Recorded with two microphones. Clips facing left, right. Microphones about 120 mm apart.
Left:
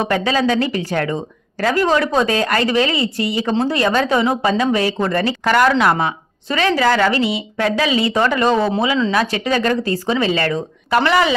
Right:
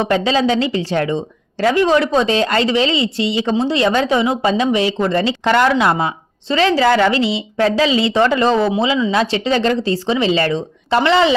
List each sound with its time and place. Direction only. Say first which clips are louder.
0.1 s speech: right 2 dB; 25° right (ahead or behind)